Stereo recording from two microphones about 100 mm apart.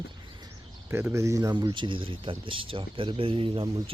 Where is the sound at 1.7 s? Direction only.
55° right (ahead or behind).